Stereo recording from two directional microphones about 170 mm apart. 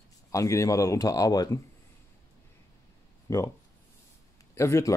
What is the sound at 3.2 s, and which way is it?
Speech, 20° left (ahead or behind).